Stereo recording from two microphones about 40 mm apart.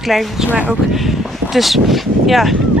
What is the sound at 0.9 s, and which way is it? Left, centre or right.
Speech, centre.